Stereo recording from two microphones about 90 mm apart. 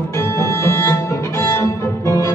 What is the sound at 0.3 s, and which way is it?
Music, 35° left (ahead or behind).